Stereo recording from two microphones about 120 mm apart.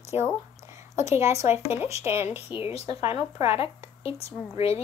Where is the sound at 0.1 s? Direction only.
20° right (ahead or behind).